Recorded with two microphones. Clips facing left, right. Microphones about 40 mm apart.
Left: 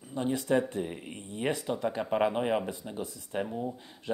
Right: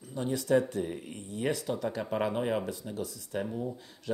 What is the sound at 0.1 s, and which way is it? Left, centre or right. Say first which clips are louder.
Speech: even; left.